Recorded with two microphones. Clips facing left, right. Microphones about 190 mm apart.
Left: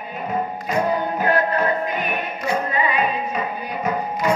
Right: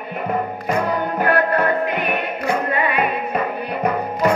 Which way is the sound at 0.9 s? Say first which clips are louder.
Even; 60° right (ahead or behind).